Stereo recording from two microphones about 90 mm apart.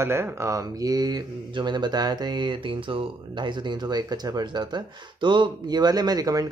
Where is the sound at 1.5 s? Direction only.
55° right (ahead or behind).